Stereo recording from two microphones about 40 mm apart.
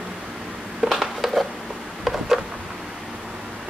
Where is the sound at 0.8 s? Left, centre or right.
Centre.